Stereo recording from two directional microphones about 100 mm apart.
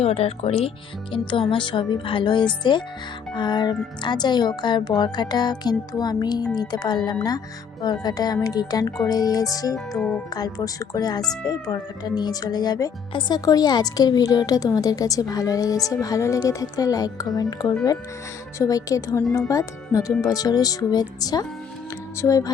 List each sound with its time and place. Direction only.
0.0 s speech: 85° left
1.3 s a woman's voice: 55° left (ahead or behind); by 22.5 s 35° left (ahead or behind)